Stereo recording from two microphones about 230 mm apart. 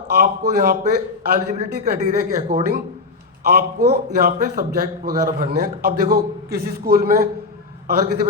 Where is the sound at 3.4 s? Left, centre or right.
Right.